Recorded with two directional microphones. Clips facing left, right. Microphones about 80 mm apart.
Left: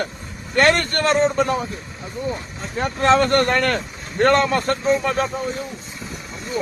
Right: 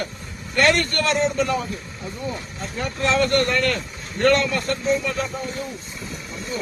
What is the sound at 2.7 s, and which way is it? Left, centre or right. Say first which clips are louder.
Speech: left 5 dB; left.